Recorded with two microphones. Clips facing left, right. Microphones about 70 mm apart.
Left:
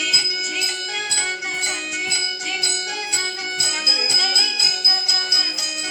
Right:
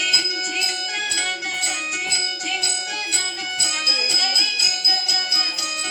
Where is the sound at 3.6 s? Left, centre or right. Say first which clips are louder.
Right 1 dB; centre.